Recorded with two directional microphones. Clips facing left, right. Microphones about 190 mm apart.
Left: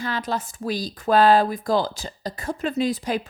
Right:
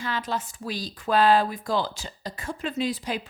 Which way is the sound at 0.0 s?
40° left (ahead or behind).